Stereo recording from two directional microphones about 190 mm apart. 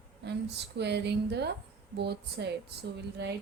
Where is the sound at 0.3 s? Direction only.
60° right (ahead or behind).